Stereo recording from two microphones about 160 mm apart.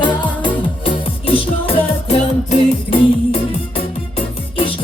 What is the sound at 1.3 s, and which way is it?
Music, 35° left (ahead or behind).